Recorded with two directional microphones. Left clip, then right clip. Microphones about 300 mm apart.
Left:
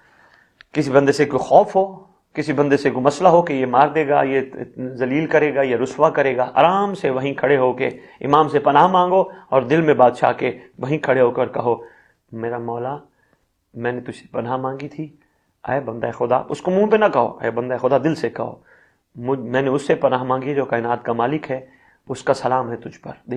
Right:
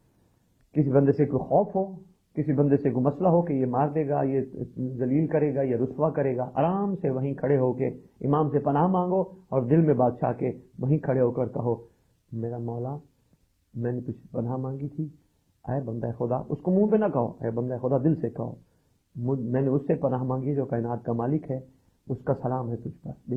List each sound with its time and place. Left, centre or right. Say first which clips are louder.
0.9 s speech: left 8 dB; centre
2.5 s speech: left 7 dB; centre
14.3 s speech: left 10 dB; centre
19.5 s speech: left 8 dB; centre